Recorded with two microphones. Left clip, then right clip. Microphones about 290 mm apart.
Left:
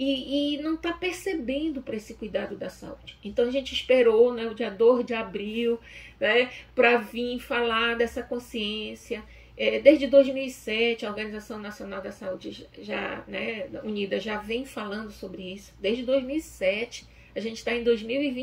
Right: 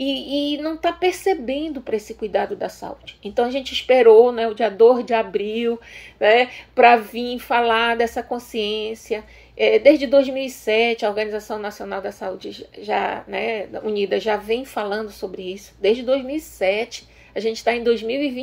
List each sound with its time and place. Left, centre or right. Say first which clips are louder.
0.0 s speech: right 4 dB; centre